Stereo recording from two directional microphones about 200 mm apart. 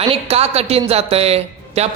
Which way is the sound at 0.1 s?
30° right (ahead or behind).